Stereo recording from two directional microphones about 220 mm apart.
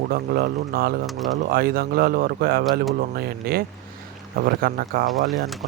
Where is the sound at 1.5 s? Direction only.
40° right (ahead or behind).